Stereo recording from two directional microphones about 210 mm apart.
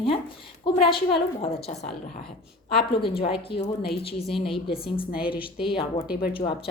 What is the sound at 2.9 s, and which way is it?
A woman's voice, 25° left (ahead or behind).